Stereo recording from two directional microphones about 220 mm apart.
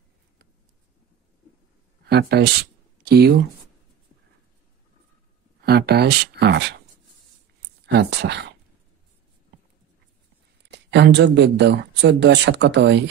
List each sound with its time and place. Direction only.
2.0 s speech: 50° right (ahead or behind)
5.6 s speech: 45° right (ahead or behind)
7.8 s speech: 50° right (ahead or behind)
10.6 s speech: 50° right (ahead or behind)